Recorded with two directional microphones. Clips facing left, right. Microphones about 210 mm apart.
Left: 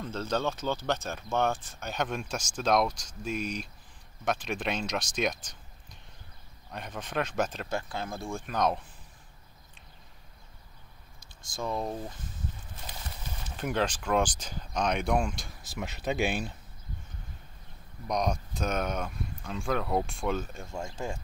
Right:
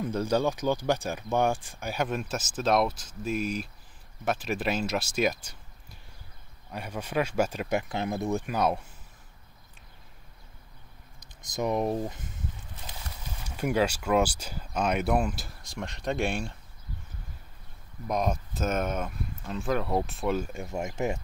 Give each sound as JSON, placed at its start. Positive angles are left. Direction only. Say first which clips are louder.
{"t": 0.0, "sound": "speech", "louder": "right 5 dB", "side_deg": -15}
{"t": 6.7, "sound": "speech", "louder": "right 4 dB", "side_deg": -10}
{"t": 11.5, "sound": "speech", "louder": "right 6 dB", "side_deg": -20}
{"t": 13.6, "sound": "speech", "louder": "right 4 dB", "side_deg": -10}
{"t": 18.0, "sound": "speech", "louder": "right 1 dB", "side_deg": -5}